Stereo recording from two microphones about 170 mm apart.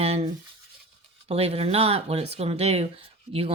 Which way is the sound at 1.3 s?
35° right (ahead or behind).